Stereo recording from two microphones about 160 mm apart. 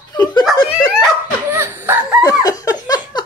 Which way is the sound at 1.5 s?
15° right (ahead or behind).